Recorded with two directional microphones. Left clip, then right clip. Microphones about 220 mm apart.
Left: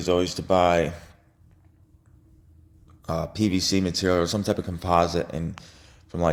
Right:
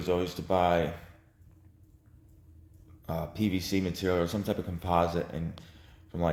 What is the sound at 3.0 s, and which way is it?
Speech, 50° left (ahead or behind).